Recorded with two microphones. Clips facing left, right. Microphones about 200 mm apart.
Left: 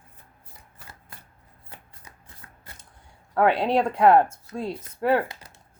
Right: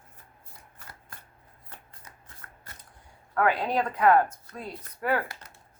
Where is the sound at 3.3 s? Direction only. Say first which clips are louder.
Left 5 dB; 25° left (ahead or behind).